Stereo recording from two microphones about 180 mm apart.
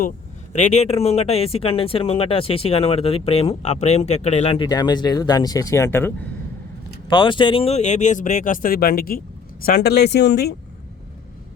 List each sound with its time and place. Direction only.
0.5 s speech: 40° left (ahead or behind); by 6.2 s 10° left (ahead or behind)
7.1 s speech: 25° left (ahead or behind); by 10.5 s 65° left (ahead or behind)